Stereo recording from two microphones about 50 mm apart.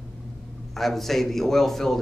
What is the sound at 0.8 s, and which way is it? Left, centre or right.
A man's voice, centre.